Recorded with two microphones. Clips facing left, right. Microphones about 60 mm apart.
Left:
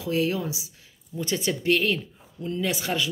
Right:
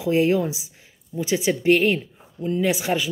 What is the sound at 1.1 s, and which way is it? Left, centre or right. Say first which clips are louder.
Speech: right 5 dB; centre.